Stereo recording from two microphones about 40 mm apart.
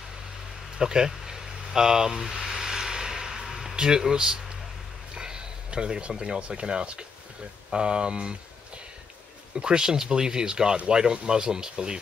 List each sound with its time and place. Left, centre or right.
0.7 s a sound: centre
3.7 s speech: centre
9.6 s speech: right